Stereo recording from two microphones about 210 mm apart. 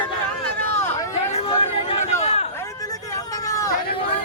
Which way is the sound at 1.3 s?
25° left (ahead or behind).